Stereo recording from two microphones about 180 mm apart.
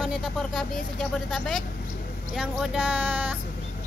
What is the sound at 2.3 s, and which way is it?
Child singing, 5° right (ahead or behind).